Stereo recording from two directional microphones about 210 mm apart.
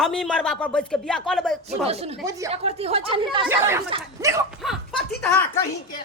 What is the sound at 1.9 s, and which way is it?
A woman's voice, 30° right (ahead or behind).